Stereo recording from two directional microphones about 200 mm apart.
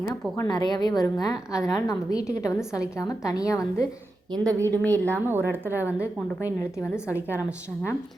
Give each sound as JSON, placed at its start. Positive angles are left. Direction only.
{"t": 0.1, "sound": "a woman's voice", "side_deg": 20}
{"t": 4.3, "sound": "a woman's voice", "side_deg": -15}
{"t": 4.7, "sound": "a woman's voice", "side_deg": 10}
{"t": 5.5, "sound": "a woman's voice", "side_deg": -10}
{"t": 6.4, "sound": "a woman's voice", "side_deg": 15}